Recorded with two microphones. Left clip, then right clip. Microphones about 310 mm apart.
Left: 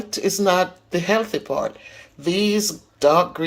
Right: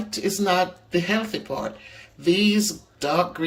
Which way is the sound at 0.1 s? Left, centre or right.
Centre.